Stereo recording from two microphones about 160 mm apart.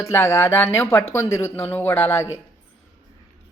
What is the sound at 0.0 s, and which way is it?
Speech, 15° left (ahead or behind).